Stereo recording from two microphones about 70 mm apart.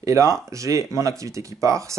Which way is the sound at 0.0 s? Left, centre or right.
Right.